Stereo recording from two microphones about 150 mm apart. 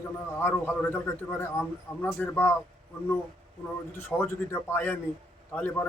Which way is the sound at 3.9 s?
15° left (ahead or behind).